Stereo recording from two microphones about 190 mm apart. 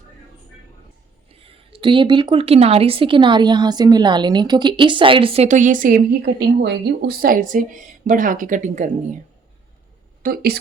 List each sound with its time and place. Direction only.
1.3 s speech: 30° right (ahead or behind)
10.2 s a woman's voice: 50° right (ahead or behind)